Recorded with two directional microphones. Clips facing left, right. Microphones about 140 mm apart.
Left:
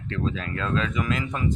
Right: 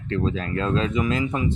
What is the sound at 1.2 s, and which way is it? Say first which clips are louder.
Speech: right 4 dB; 15° right (ahead or behind).